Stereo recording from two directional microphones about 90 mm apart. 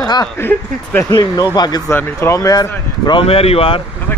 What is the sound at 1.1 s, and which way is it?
Speech, 50° left (ahead or behind).